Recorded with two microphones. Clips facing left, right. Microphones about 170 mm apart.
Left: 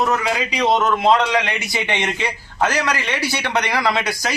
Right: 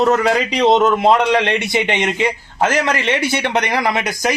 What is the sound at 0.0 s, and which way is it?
Speech, 40° right (ahead or behind).